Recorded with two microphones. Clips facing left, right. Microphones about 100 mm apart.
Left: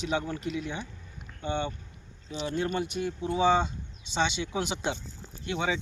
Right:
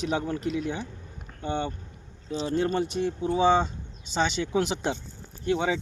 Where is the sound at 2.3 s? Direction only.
35° right (ahead or behind).